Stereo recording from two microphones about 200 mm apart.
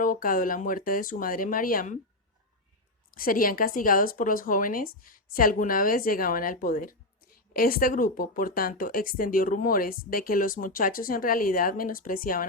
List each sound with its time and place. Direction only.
0.0 s speech: 45° left (ahead or behind)
3.2 s speech: 45° left (ahead or behind)